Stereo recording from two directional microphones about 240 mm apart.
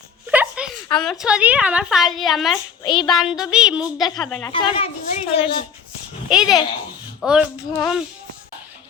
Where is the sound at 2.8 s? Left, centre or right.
Centre.